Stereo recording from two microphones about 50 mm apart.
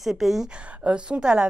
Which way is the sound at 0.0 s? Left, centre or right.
Centre.